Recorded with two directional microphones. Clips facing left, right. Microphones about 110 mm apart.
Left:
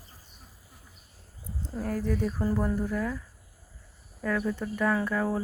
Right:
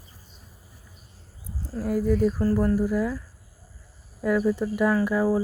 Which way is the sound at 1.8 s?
10° right (ahead or behind).